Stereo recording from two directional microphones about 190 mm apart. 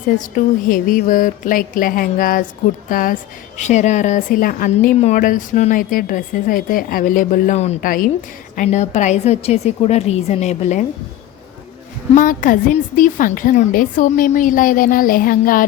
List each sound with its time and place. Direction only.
0.3 s a woman's voice: 45° left (ahead or behind)
12.1 s speech: 45° left (ahead or behind)